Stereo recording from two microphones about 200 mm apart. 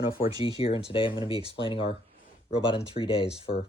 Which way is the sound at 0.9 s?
25° left (ahead or behind).